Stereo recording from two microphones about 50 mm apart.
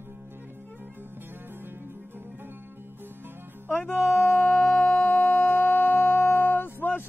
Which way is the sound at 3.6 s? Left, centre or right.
Left.